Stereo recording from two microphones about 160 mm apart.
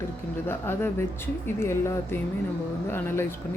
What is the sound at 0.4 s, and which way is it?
Speech, 15° left (ahead or behind).